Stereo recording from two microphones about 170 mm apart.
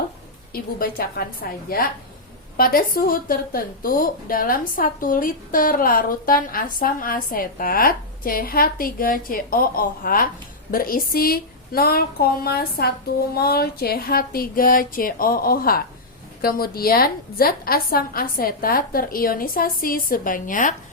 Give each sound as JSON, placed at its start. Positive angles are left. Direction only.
{"t": 0.5, "sound": "a woman's voice", "side_deg": 60}